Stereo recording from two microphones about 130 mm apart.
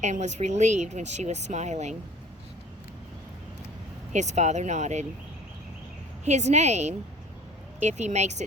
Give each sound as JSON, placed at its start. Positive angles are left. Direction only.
{"t": 0.0, "sound": "speech", "side_deg": -65}
{"t": 4.1, "sound": "speech", "side_deg": -65}
{"t": 6.2, "sound": "speech", "side_deg": -60}